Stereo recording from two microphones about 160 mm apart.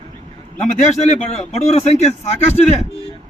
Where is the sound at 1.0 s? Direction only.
45° left (ahead or behind).